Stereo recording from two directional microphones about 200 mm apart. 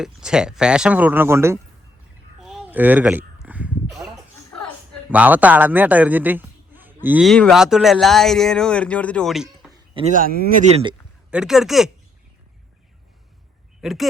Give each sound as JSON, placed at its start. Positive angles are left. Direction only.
{"t": 0.0, "sound": "a man's voice", "side_deg": -5}
{"t": 2.4, "sound": "a sound", "side_deg": 0}
{"t": 5.1, "sound": "a man's voice", "side_deg": -10}
{"t": 9.9, "sound": "speech", "side_deg": -35}
{"t": 11.3, "sound": "a man's voice", "side_deg": -5}
{"t": 13.8, "sound": "a man's voice", "side_deg": 0}